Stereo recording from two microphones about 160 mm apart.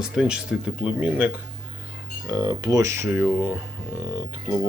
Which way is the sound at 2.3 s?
20° right (ahead or behind).